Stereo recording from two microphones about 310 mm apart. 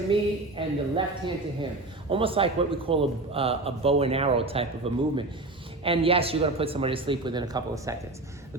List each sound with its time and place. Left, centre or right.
0.1 s a man's voice: centre